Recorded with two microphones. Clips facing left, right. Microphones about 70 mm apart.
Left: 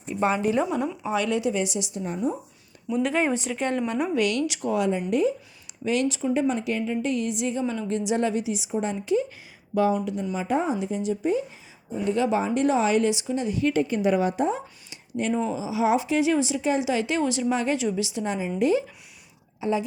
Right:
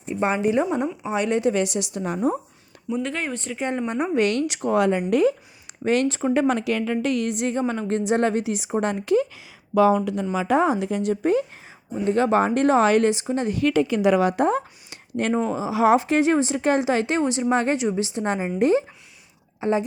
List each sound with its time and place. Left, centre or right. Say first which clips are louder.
0.0 s a woman's voice: right 2 dB; right
1.4 s a woman's voice: right 4 dB; right
3.0 s speech: left 6 dB; centre
3.6 s speech: right 3 dB; centre; by 4.7 s right
4.7 s a woman's voice: right 5 dB; right
5.8 s a woman's voice: right 3 dB; right
6.5 s a woman's voice: right 3 dB; right
9.7 s a woman's voice: right 5 dB; right
12.0 s a woman's voice: right 4 dB; right
13.7 s a woman's voice: right 4 dB; right
17.2 s a woman's voice: right 2 dB; right
17.5 s a woman's voice: right 3 dB; right